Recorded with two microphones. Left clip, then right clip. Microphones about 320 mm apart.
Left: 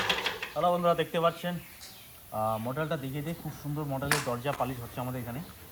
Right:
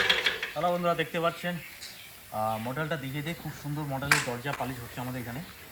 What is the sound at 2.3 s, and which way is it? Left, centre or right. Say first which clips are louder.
Speech: even; centre.